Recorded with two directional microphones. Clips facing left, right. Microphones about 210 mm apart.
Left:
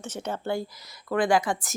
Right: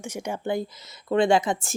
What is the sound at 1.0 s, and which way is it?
Speech, 25° right (ahead or behind).